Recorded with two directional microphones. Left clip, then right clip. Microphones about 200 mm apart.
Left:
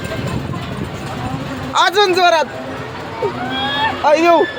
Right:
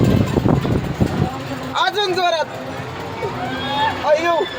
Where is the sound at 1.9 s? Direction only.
35° left (ahead or behind).